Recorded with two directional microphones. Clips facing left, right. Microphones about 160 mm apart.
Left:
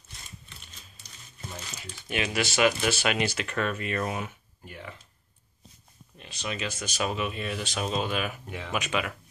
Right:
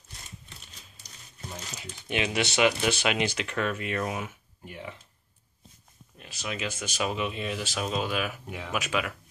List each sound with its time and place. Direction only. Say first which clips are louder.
1.8 s speech: right 1 dB; 20° right (ahead or behind)
6.1 s speech: left 1 dB; 5° right (ahead or behind)
7.7 s speech: left 1 dB; 5° right (ahead or behind)